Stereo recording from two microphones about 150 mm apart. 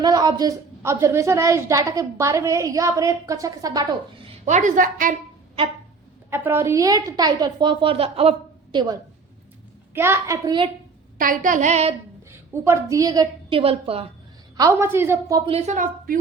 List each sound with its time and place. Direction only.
0.0 s a woman's voice: 25° right (ahead or behind)
4.4 s a sound: 55° right (ahead or behind)
6.3 s a woman's voice: 15° right (ahead or behind); by 8.8 s 40° right (ahead or behind)
9.9 s a woman's voice: 15° right (ahead or behind)
11.2 s a sound: 65° right (ahead or behind); by 11.9 s 45° right (ahead or behind)
12.6 s a woman's voice: 20° right (ahead or behind)
13.5 s a woman's voice: 40° right (ahead or behind)
14.5 s a woman's voice: 20° right (ahead or behind)
15.4 s a woman's voice: 40° right (ahead or behind); by 16.1 s 55° right (ahead or behind)